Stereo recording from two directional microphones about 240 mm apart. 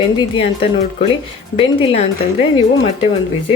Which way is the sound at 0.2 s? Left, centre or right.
Left.